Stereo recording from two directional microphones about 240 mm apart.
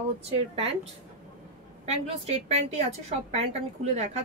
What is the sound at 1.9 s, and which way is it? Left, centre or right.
Speech, right.